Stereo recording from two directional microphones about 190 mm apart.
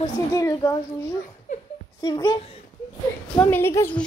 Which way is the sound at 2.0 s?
20° left (ahead or behind).